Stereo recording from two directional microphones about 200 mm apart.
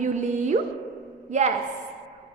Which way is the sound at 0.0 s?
40° right (ahead or behind).